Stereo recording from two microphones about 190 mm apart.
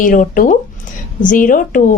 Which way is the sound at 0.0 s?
45° left (ahead or behind).